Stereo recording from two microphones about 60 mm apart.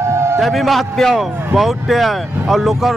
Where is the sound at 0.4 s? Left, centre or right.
Centre.